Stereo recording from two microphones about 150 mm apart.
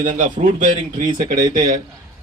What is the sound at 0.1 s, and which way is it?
Speech, 60° right (ahead or behind).